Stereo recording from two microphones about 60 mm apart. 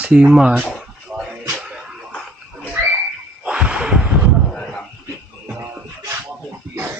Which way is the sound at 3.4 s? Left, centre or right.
Centre.